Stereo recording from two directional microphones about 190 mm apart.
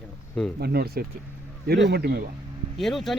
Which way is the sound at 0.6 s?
55° right (ahead or behind).